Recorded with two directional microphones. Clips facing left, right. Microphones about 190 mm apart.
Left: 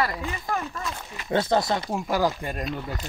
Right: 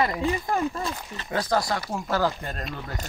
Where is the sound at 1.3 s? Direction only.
25° left (ahead or behind).